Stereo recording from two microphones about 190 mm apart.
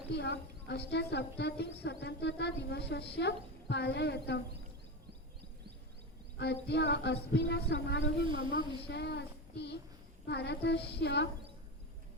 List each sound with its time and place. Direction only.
0.1 s a woman's voice: 65° left (ahead or behind)
6.4 s a woman's voice: 60° left (ahead or behind)